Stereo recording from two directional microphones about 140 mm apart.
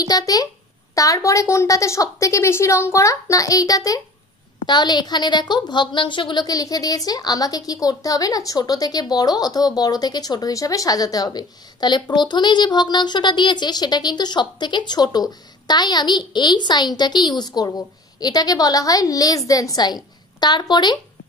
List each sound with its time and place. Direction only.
0.0 s a woman's voice: 25° left (ahead or behind)